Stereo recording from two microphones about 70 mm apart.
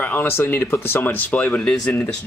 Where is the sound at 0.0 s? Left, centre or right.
Left.